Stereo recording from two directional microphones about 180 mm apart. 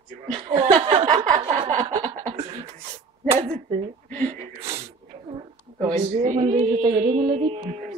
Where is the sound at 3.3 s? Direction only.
35° right (ahead or behind).